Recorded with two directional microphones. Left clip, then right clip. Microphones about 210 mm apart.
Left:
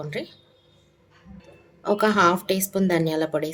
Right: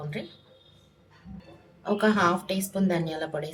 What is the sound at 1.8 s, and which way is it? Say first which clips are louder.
Speech: left 5 dB; 45° left (ahead or behind).